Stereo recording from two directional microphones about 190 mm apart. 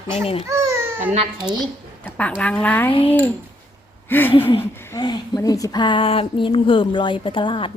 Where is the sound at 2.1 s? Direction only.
5° left (ahead or behind).